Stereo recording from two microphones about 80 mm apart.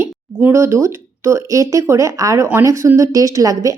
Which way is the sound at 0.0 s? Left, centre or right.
Right.